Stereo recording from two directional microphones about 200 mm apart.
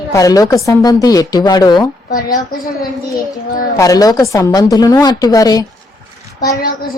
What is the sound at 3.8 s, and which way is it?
Speech, 15° left (ahead or behind).